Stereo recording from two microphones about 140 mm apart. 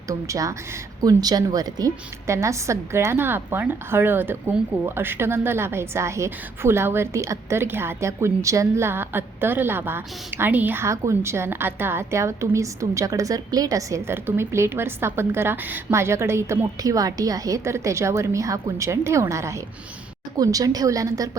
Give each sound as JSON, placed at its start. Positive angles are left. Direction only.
{"t": 0.1, "sound": "a woman's voice", "side_deg": -25}